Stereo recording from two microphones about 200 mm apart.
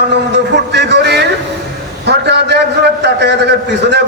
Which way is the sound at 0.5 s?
60° right (ahead or behind).